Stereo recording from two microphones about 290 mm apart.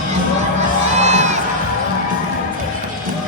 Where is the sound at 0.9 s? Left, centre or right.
Right.